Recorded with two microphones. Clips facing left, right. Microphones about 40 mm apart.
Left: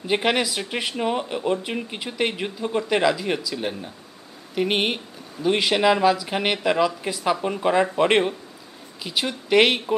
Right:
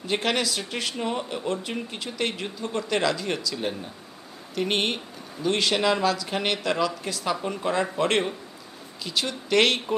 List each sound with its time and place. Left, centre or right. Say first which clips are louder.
0.0 s speech: left 4 dB; centre